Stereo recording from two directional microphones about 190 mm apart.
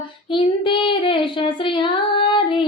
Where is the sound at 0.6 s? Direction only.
25° left (ahead or behind).